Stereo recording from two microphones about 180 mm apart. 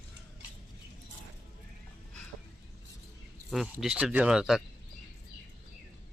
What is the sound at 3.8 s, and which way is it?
Speech, 5° right (ahead or behind).